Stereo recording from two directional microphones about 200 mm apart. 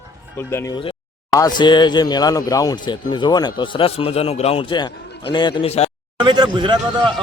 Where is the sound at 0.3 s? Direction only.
15° left (ahead or behind); by 5.9 s 30° left (ahead or behind).